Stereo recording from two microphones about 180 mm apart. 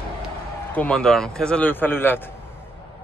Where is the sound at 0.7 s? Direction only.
5° left (ahead or behind).